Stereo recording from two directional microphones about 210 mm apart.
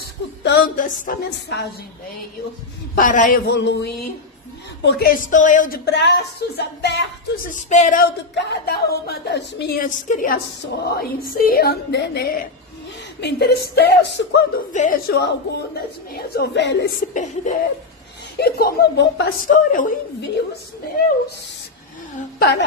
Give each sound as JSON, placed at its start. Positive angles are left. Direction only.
{"t": 0.4, "sound": "a woman's voice", "side_deg": 55}
{"t": 0.7, "sound": "speech", "side_deg": 40}
{"t": 1.3, "sound": "a woman's voice", "side_deg": 55}
{"t": 2.9, "sound": "a woman's voice", "side_deg": 40}
{"t": 5.9, "sound": "a woman's voice", "side_deg": 55}
{"t": 7.5, "sound": "speech", "side_deg": 35}
{"t": 8.4, "sound": "a woman's voice", "side_deg": 45}
{"t": 14.7, "sound": "a woman's voice", "side_deg": 40}
{"t": 17.1, "sound": "a woman's voice", "side_deg": 40}